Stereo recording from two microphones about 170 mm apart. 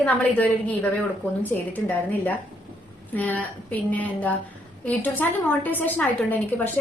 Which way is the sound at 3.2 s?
10° left (ahead or behind).